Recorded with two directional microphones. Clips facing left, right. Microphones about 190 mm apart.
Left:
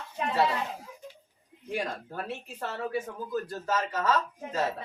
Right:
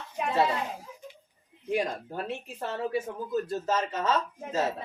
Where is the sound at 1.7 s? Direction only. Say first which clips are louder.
Right 4 dB; 20° right (ahead or behind).